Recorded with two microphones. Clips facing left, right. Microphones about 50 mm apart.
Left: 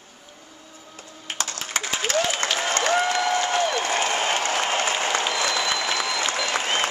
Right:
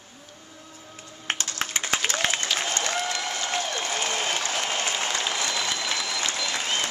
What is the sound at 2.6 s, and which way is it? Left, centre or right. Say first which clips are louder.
Applause: left 6 dB; left.